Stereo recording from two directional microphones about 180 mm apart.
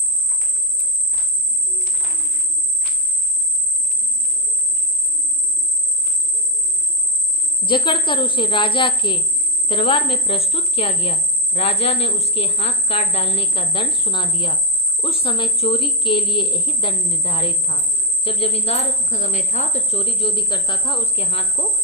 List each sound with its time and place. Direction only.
7.6 s a woman's voice: 25° left (ahead or behind)